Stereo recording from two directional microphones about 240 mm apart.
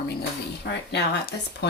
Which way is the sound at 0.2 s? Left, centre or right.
Left.